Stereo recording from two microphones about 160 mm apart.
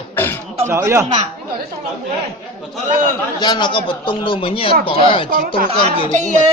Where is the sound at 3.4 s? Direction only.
25° left (ahead or behind).